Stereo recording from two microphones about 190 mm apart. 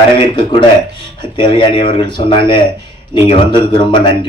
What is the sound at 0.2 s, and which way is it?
Speech, 25° left (ahead or behind).